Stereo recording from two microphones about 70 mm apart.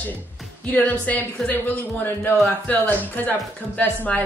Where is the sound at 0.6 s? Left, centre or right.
Left.